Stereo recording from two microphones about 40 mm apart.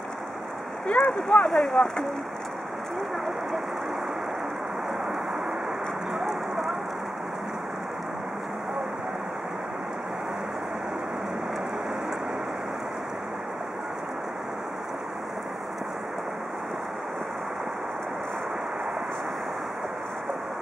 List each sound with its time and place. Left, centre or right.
0.8 s speech: left
1.5 s speech: centre
6.1 s rain on surface: centre